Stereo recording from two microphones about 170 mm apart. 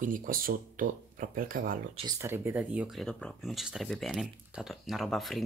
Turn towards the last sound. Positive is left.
turn(degrees=0)  # may be behind; listen again after turning